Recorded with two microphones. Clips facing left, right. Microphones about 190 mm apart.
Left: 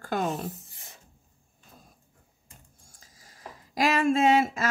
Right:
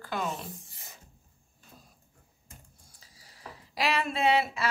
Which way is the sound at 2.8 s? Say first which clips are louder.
Left 2 dB; 45° left (ahead or behind).